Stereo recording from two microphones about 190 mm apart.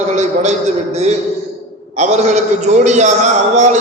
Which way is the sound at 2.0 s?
35° right (ahead or behind).